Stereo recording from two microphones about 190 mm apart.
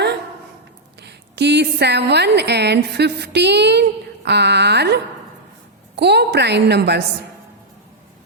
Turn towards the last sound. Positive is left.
turn(degrees=-60)  # may be behind; listen again after turning